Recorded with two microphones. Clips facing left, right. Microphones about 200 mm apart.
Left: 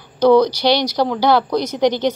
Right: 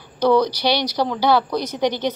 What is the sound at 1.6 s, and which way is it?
Speech, 10° left (ahead or behind).